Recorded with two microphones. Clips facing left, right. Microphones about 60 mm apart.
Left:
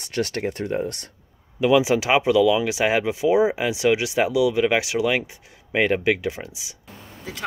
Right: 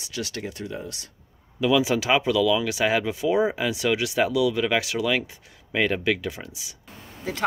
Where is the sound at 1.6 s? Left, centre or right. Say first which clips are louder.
Left 3 dB; left.